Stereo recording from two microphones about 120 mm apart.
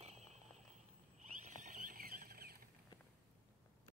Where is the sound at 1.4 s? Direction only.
90° right.